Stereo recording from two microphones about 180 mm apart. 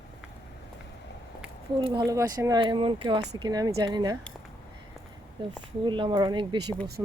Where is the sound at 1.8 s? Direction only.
25° right (ahead or behind).